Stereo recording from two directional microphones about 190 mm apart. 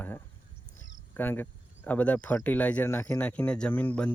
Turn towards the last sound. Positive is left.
turn(degrees=10)  # may be behind; listen again after turning